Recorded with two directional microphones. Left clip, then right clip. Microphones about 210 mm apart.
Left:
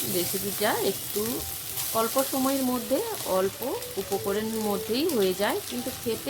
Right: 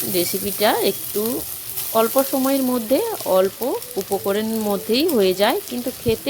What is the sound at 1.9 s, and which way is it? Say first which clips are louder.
Frying: right 8 dB; 30° right (ahead or behind).